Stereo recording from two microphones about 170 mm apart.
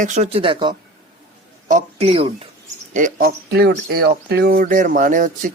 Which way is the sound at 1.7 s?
40° right (ahead or behind).